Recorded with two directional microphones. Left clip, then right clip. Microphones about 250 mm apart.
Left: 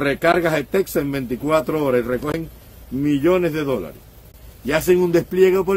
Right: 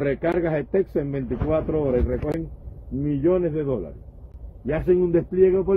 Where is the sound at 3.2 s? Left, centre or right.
Centre.